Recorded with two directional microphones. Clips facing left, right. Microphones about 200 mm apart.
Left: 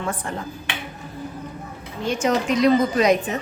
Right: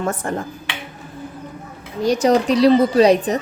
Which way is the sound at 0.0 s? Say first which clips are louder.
Right 5 dB; 45° right (ahead or behind).